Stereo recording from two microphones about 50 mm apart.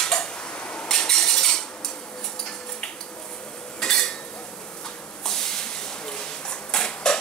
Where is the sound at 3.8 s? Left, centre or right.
Centre.